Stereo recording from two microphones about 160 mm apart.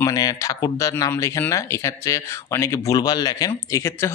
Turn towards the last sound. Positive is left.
turn(degrees=20)  # may be behind; listen again after turning